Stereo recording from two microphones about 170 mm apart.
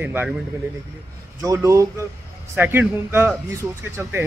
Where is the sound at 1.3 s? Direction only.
20° right (ahead or behind).